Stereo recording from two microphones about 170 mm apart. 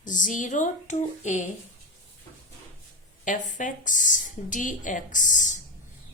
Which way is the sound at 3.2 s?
50° left (ahead or behind).